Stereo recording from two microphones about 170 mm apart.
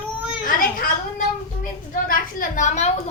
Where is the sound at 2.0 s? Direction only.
55° left (ahead or behind).